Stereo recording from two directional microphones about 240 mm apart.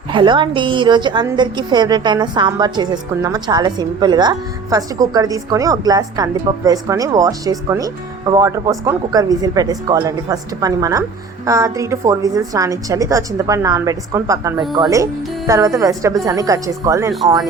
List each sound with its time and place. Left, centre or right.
0.1 s a woman's voice: centre